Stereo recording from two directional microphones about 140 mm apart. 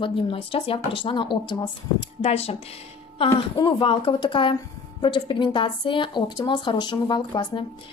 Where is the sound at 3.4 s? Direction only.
35° left (ahead or behind).